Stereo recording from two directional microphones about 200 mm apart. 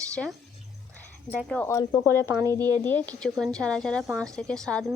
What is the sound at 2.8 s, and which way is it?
Speech, 10° left (ahead or behind).